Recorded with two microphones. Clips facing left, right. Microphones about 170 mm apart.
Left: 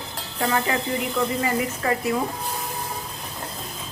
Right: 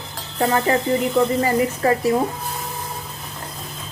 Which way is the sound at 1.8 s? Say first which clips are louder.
Right 6 dB; 35° right (ahead or behind).